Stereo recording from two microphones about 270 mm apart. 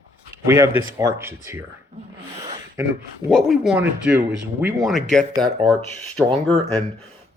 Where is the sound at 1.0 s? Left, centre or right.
Centre.